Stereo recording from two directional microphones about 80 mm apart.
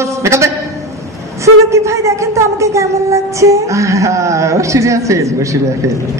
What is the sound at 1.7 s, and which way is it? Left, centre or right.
Speech, right.